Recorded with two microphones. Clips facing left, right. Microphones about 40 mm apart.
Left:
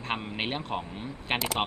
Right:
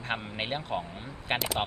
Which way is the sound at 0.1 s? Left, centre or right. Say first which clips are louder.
Left 1 dB; centre.